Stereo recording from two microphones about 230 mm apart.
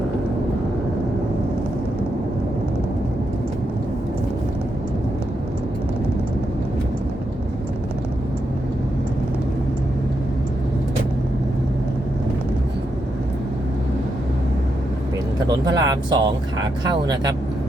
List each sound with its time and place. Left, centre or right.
15.4 s speech: centre